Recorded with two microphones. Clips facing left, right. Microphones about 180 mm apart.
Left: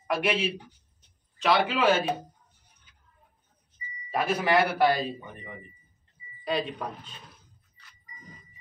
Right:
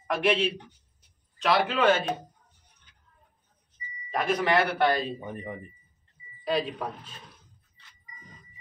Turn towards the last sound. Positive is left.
turn(degrees=0)  # may be behind; listen again after turning